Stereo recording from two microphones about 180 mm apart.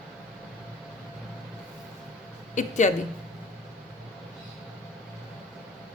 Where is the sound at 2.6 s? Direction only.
40° left (ahead or behind).